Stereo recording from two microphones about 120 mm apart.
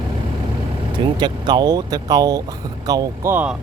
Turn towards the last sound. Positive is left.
turn(degrees=-15)  # may be behind; listen again after turning